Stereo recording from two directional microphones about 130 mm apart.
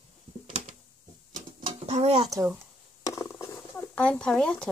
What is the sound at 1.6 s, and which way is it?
Dishes, 55° right (ahead or behind).